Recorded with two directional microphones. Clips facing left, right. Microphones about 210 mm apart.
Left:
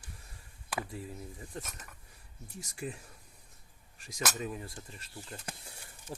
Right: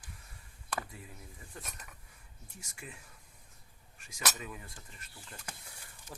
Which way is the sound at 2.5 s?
35° left (ahead or behind).